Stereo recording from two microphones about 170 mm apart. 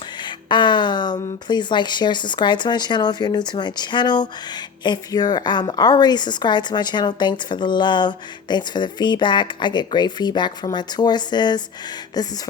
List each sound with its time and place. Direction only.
0.2 s speech: 25° left (ahead or behind)